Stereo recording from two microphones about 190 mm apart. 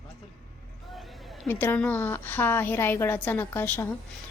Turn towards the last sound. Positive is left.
turn(degrees=10)  # may be behind; listen again after turning